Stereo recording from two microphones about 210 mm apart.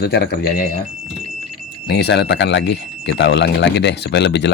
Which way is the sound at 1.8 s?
50° left (ahead or behind).